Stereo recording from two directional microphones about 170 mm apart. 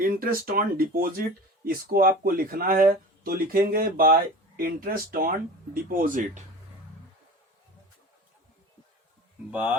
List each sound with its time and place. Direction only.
0.0 s speech: 60° right (ahead or behind)
9.5 s speech: 5° right (ahead or behind)